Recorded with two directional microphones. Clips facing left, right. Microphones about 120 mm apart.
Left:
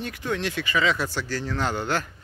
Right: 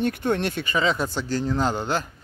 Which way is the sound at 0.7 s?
30° right (ahead or behind).